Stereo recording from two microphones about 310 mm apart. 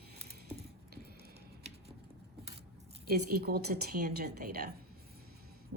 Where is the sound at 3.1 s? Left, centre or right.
Right.